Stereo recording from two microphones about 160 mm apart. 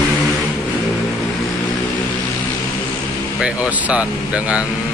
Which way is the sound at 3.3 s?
5° right (ahead or behind).